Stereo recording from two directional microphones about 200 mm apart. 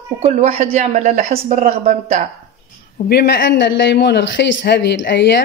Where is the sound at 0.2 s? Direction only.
30° right (ahead or behind).